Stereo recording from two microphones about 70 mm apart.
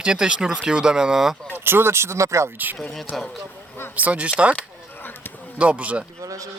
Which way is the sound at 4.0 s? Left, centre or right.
Right.